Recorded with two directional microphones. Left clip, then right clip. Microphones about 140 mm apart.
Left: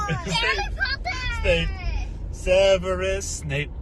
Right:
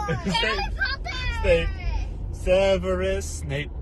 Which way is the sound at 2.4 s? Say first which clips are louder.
Left 2 dB; 45° right (ahead or behind).